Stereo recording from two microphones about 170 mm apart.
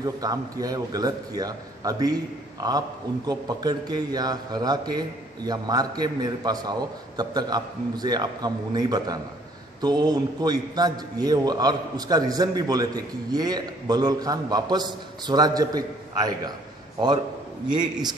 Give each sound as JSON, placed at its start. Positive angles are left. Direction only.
{"t": 0.0, "sound": "a man's voice", "side_deg": -20}